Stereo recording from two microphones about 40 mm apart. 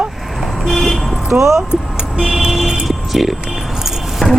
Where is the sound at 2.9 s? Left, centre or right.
Centre.